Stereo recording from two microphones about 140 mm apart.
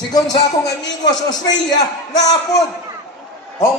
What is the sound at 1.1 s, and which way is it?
Speech, 30° left (ahead or behind).